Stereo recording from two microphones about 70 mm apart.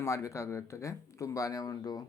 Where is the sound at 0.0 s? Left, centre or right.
Left.